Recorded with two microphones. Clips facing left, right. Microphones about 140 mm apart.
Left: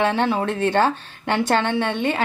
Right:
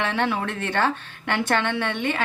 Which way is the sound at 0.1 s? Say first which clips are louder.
Left 4 dB; 30° left (ahead or behind).